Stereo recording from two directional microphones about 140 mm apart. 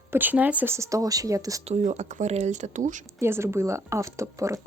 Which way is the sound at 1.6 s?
55° right (ahead or behind).